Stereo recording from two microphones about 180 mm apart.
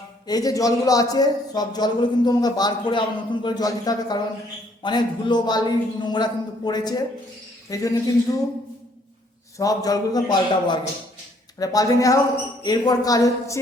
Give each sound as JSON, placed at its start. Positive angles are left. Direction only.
{"t": 0.3, "sound": "speech", "side_deg": 20}
{"t": 9.6, "sound": "speech", "side_deg": 20}